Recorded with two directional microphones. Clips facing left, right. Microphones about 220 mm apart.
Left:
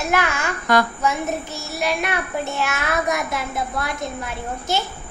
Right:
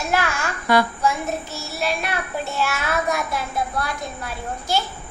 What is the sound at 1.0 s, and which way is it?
Child singing, 20° left (ahead or behind).